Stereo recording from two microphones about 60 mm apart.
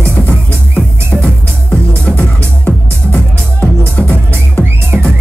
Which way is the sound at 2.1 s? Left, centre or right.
Centre.